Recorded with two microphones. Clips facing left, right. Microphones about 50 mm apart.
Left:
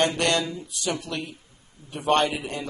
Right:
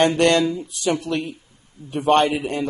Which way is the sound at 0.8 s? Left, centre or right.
Right.